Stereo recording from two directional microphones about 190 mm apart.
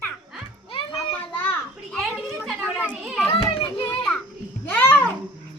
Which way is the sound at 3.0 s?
Centre (ahead or behind).